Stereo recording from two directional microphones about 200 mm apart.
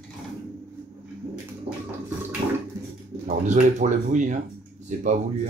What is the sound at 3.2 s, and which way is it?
Speech, 40° right (ahead or behind).